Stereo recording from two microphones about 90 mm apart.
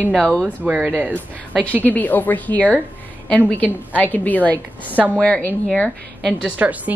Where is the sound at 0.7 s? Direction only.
15° right (ahead or behind).